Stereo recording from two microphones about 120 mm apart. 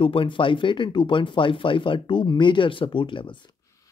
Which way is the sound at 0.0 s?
50° left (ahead or behind).